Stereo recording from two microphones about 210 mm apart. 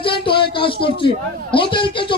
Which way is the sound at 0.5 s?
25° left (ahead or behind).